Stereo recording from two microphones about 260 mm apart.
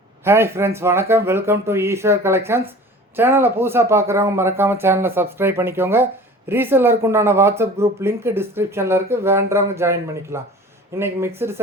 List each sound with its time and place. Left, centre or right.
0.3 s speech: centre